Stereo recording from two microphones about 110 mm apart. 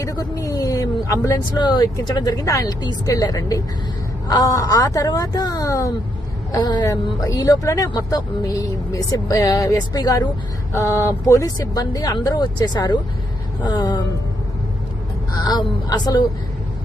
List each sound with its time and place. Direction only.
0.0 s speech: 30° left (ahead or behind)
10.7 s speech: 25° left (ahead or behind)
15.4 s speech: 40° left (ahead or behind)